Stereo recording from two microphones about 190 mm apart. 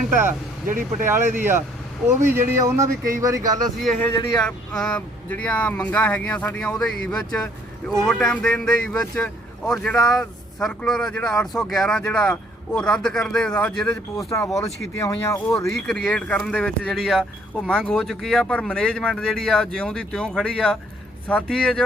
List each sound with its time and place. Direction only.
0.3 s speech: 45° right (ahead or behind)
1.0 s speech: 10° right (ahead or behind)
3.8 s speech: 5° left (ahead or behind)
4.1 s speech: 25° left (ahead or behind)
4.4 s speech: 5° left (ahead or behind)
14.3 s speech: 15° left (ahead or behind)